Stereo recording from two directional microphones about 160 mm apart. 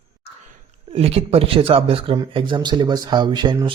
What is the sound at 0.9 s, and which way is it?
Speech, 40° right (ahead or behind).